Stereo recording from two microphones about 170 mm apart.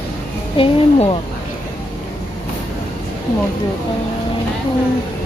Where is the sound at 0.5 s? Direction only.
30° left (ahead or behind).